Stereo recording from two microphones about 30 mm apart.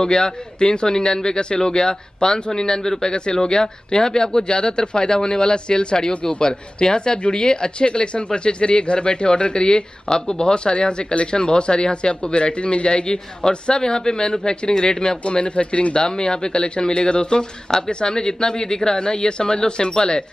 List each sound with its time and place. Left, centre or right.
0.0 s speech: left